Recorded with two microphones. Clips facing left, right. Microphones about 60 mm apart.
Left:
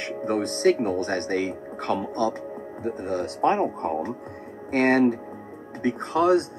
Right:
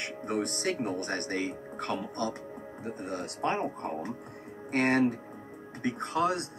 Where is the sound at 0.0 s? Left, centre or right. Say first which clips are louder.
Left 6 dB; left.